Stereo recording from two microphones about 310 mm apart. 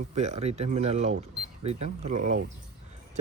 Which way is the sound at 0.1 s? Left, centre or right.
Right.